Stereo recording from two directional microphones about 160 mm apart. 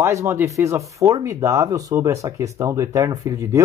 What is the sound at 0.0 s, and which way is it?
Speech, 15° right (ahead or behind).